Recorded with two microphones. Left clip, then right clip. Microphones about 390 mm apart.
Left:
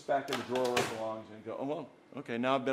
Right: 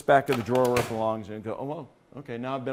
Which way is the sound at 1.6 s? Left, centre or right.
Right.